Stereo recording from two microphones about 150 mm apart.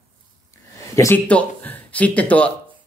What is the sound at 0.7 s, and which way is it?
Speech, 20° left (ahead or behind).